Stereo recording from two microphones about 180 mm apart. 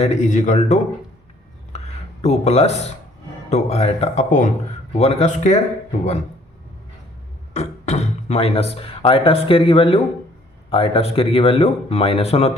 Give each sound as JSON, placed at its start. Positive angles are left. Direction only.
{"t": 0.0, "sound": "speech", "side_deg": 40}
{"t": 1.7, "sound": "a sound", "side_deg": 35}
{"t": 2.2, "sound": "speech", "side_deg": 40}
{"t": 7.5, "sound": "speech", "side_deg": 35}